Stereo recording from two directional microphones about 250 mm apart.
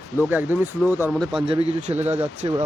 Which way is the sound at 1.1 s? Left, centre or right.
Centre.